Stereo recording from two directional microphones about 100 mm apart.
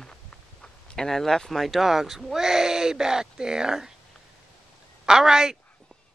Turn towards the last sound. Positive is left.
turn(degrees=-5)  # may be behind; listen again after turning